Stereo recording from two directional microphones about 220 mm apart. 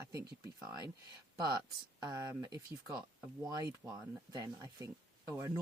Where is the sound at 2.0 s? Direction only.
20° right (ahead or behind).